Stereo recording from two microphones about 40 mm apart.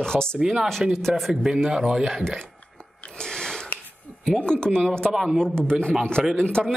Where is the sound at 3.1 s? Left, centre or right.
Centre.